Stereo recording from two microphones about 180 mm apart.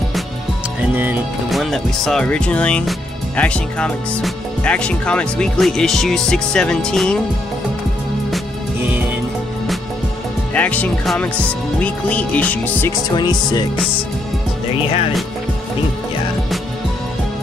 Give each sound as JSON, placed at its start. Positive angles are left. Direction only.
{"t": 1.5, "sound": "speech", "side_deg": 0}
{"t": 10.5, "sound": "speech", "side_deg": 10}
{"t": 13.1, "sound": "speech", "side_deg": 25}